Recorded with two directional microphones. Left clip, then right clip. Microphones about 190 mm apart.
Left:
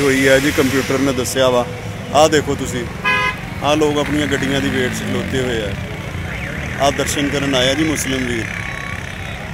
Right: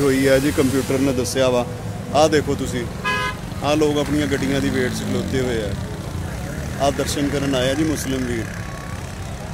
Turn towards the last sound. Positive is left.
turn(degrees=5)  # may be behind; listen again after turning